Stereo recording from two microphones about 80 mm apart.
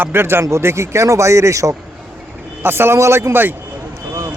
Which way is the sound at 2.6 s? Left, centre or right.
Right.